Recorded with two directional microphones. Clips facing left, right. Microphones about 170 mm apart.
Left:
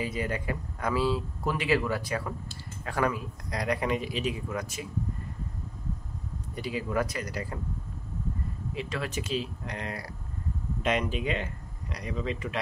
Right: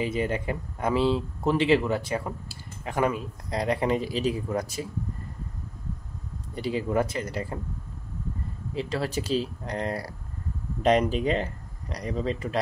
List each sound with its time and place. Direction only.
0.0 s speech: 25° right (ahead or behind)
6.5 s speech: 30° right (ahead or behind)
8.7 s speech: 30° right (ahead or behind)